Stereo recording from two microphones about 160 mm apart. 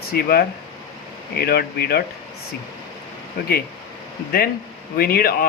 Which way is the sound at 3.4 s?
75° left (ahead or behind).